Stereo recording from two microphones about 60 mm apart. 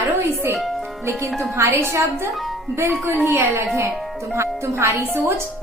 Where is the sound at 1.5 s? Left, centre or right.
Right.